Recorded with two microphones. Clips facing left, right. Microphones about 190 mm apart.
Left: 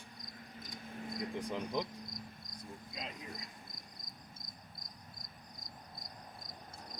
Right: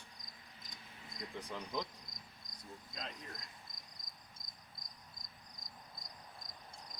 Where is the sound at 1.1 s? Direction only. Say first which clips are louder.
Left 7 dB; 55° left (ahead or behind).